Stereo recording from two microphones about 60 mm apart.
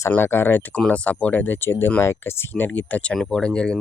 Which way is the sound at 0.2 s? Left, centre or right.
Left.